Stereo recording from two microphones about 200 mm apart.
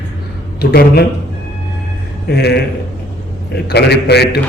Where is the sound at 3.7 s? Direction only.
55° left (ahead or behind).